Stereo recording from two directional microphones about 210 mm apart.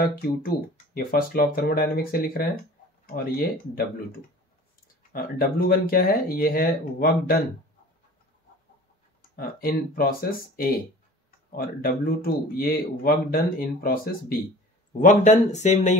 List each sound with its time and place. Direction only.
0.0 s speech: 45° left (ahead or behind)
5.1 s speech: 45° left (ahead or behind)
9.4 s speech: 45° left (ahead or behind)
11.5 s speech: 45° left (ahead or behind)
15.0 s speech: 35° left (ahead or behind)